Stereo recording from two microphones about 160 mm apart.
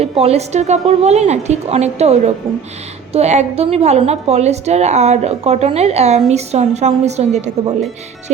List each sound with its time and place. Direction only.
0.0 s a woman's voice: 40° right (ahead or behind)